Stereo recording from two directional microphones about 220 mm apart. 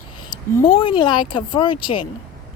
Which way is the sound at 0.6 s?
25° left (ahead or behind).